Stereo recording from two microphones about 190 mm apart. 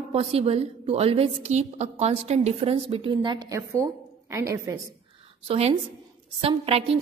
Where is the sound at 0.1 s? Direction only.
30° right (ahead or behind); by 4.7 s 15° right (ahead or behind).